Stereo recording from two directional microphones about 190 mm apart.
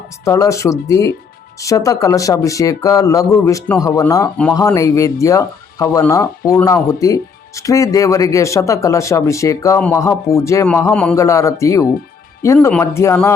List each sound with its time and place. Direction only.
0.3 s speech: 15° left (ahead or behind)